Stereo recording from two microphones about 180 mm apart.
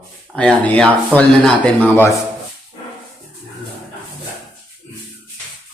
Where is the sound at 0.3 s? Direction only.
5° left (ahead or behind).